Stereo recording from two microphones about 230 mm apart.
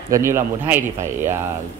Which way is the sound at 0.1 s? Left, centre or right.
Centre.